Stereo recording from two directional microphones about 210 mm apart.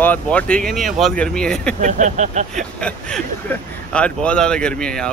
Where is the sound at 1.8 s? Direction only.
35° right (ahead or behind).